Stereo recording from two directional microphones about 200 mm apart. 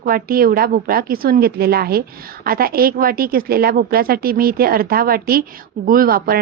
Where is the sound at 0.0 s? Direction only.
45° right (ahead or behind).